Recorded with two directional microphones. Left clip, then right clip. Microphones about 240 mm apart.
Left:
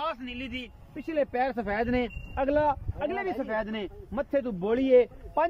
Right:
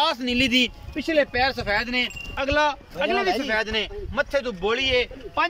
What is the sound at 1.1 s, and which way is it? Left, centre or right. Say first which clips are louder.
A man's voice: right 6 dB; left.